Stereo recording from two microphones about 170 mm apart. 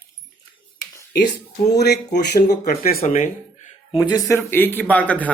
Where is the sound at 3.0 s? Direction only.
40° left (ahead or behind).